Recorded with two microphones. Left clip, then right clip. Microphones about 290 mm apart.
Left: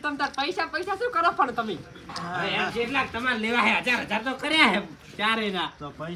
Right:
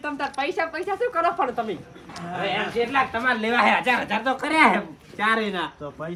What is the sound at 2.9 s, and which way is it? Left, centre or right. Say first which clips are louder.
Speech: right 4 dB; centre.